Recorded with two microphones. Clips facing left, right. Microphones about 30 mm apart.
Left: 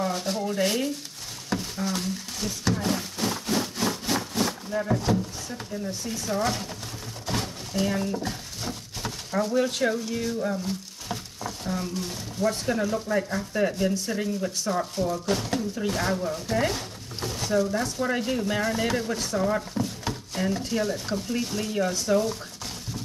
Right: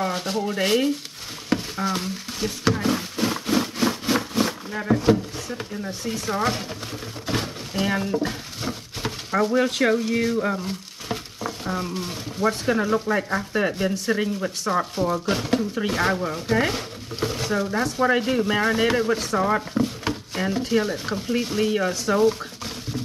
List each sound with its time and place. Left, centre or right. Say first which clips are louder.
0.0 s a sound: right 2 dB; right
0.5 s chopping: right 5 dB; right
1.5 s stir: right 5 dB; right
2.9 s a sound: right 4 dB; right
6.0 s chopping: right 3 dB; right
7.2 s a sound: right 3 dB; right
9.5 s speech: right 3 dB; right
10.6 s speech: right 1 dB; right
14.0 s chopping: right 4 dB; right
15.2 s speech: right 4 dB; right
15.7 s chopping: right 4 dB; right
19.7 s a sound: right 5 dB; right
21.3 s chopping: right 10 dB; right